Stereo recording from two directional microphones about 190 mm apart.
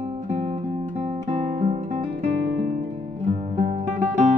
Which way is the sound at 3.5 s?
35° right (ahead or behind).